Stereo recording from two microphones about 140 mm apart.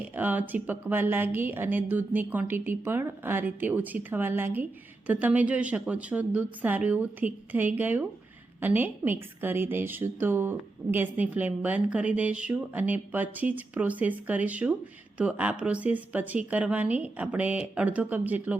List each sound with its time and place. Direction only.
0.1 s a woman's voice: 10° right (ahead or behind)